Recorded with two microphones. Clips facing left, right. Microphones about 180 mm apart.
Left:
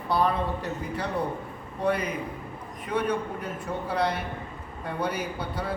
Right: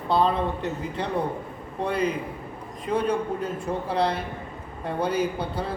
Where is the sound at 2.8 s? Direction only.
30° right (ahead or behind).